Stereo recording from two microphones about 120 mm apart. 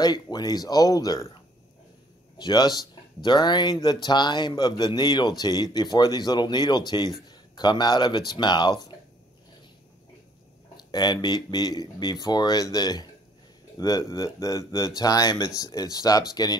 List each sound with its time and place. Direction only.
0.0 s speech: 35° left (ahead or behind)
10.8 s speech: 35° left (ahead or behind)